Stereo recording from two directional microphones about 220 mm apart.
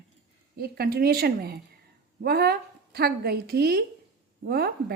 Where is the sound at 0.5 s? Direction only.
45° right (ahead or behind).